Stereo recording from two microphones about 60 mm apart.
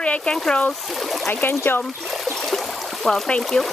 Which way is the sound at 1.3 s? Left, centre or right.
Left.